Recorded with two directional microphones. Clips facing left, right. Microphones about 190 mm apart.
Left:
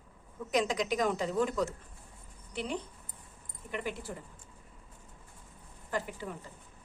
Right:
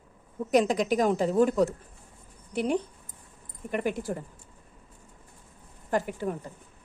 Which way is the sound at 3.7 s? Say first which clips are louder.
Right 8 dB; 50° right (ahead or behind).